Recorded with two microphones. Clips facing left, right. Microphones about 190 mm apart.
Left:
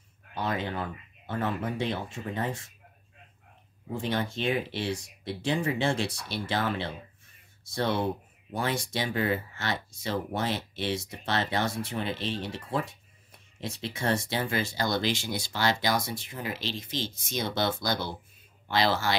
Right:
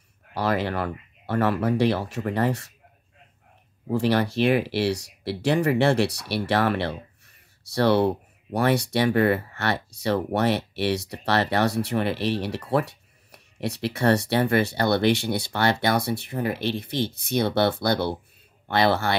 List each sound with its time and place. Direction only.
0.3 s speech: 75° right (ahead or behind)
3.9 s speech: 70° right (ahead or behind)